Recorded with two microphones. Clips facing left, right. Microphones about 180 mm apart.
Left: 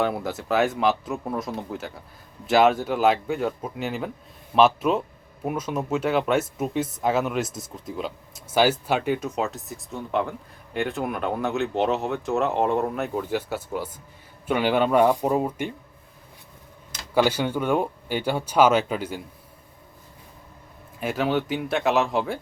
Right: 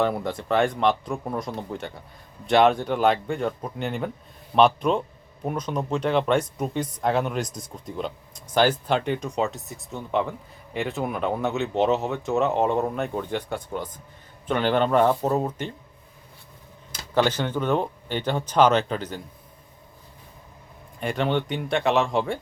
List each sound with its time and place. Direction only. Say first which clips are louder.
0.0 s speech: right 1 dB; 5° left (ahead or behind)
17.2 s speech: left 1 dB; 10° left (ahead or behind)
21.0 s speech: even; 5° left (ahead or behind)